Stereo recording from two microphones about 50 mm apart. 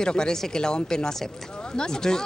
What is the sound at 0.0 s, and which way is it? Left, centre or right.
Speech, centre.